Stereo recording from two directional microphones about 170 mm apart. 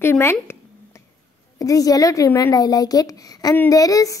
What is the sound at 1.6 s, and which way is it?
A woman's voice, 20° left (ahead or behind).